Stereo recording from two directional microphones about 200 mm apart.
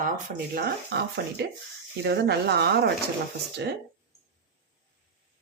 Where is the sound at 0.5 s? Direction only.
50° right (ahead or behind).